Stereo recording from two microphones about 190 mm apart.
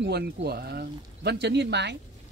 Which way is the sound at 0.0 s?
60° right (ahead or behind).